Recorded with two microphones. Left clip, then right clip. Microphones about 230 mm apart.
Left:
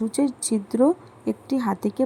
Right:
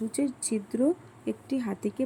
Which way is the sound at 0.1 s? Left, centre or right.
Centre.